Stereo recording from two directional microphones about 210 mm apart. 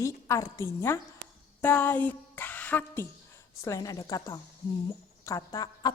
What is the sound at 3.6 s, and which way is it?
A woman's voice, 15° left (ahead or behind).